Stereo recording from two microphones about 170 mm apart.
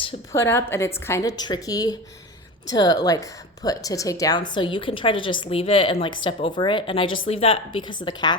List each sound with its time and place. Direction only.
0.3 s a woman's voice: 15° left (ahead or behind)